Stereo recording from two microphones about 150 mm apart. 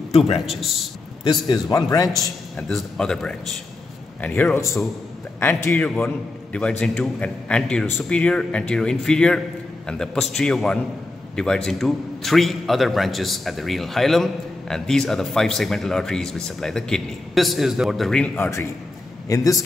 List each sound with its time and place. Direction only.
1.2 s a man's voice: 30° left (ahead or behind)
2.0 s a man's voice: centre (ahead or behind)
19.2 s a man's voice: 20° left (ahead or behind)